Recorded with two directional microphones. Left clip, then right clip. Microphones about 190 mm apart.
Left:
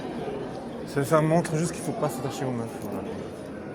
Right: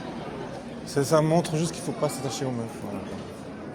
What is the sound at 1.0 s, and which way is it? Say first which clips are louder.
Speech: right 1 dB; 10° right (ahead or behind).